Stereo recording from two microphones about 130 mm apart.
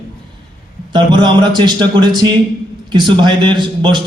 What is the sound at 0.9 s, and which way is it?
A man's voice, 35° right (ahead or behind).